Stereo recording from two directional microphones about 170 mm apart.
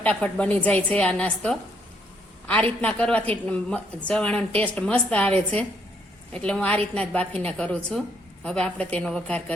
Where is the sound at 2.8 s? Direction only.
5° left (ahead or behind).